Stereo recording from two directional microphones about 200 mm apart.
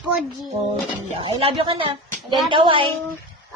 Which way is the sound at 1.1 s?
30° right (ahead or behind).